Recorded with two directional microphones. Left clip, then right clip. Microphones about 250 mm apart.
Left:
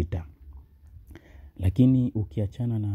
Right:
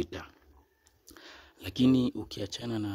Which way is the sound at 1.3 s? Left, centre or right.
Centre.